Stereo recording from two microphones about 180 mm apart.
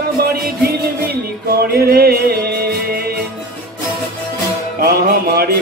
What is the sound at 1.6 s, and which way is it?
Music, 60° right (ahead or behind).